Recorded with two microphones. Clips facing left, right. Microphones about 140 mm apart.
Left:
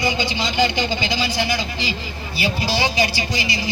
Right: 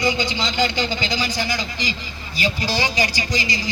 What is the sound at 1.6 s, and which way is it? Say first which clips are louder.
Speech: left 2 dB; 15° right (ahead or behind).